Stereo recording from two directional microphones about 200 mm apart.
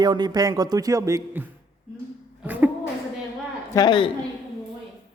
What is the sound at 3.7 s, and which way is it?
Speech, 20° left (ahead or behind).